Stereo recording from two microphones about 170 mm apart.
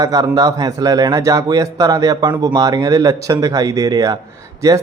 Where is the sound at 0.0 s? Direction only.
20° right (ahead or behind).